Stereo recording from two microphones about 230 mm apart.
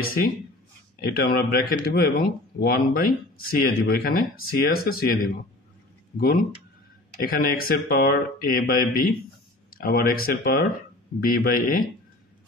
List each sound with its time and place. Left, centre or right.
1.0 s speech: left
7.2 s speech: left